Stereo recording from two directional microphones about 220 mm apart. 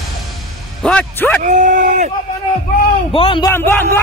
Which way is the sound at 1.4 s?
35° right (ahead or behind).